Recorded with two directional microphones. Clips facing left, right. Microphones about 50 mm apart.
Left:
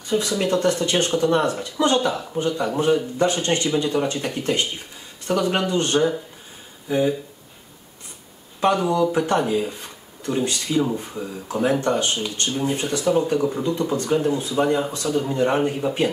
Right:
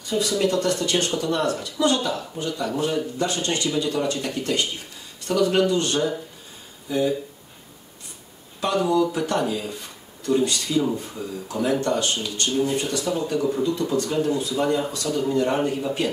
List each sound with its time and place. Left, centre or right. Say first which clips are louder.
0.1 s speech: left 1 dB; left
8.8 s speech: left 1 dB; left